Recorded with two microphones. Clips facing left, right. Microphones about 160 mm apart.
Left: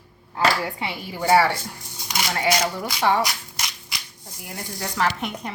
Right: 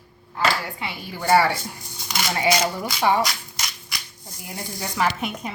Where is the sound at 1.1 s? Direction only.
10° left (ahead or behind).